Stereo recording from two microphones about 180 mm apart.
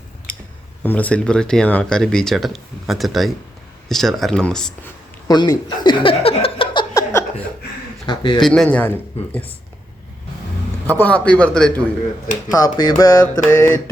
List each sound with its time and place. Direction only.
0.8 s speech: 10° left (ahead or behind)
5.3 s speech: 25° left (ahead or behind)
6.9 s chuckle: 15° left (ahead or behind)
8.0 s a sound: 25° left (ahead or behind)
8.4 s speech: centre (ahead or behind)
10.8 s a man's voice: 10° left (ahead or behind)
12.5 s a sound: 20° left (ahead or behind)
13.6 s a man's voice: 15° left (ahead or behind)